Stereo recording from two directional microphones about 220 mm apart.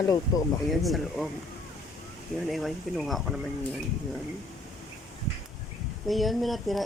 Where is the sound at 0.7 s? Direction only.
Centre (ahead or behind).